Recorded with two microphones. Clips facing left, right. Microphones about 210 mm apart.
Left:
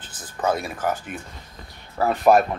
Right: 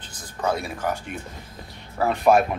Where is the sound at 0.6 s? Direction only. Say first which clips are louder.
Left 1 dB; centre (ahead or behind).